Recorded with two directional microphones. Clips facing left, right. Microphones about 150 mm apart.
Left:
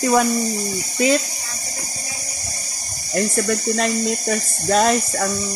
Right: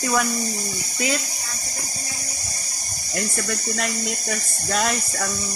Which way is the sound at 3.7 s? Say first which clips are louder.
Left 7 dB; 35° left (ahead or behind).